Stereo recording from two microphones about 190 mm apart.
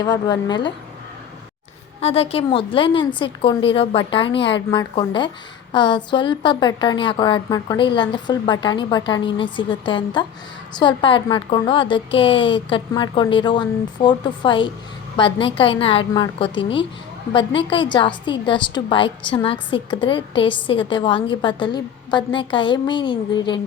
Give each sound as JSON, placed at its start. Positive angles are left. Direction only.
{"t": 0.0, "sound": "a woman's voice", "side_deg": 20}
{"t": 2.0, "sound": "a woman's voice", "side_deg": 30}